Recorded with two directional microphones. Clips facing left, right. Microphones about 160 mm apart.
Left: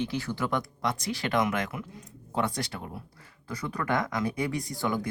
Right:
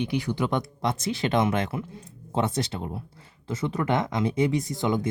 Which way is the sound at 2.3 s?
25° right (ahead or behind).